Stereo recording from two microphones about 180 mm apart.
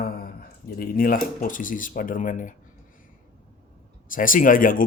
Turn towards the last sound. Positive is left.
turn(degrees=50)  # may be behind; listen again after turning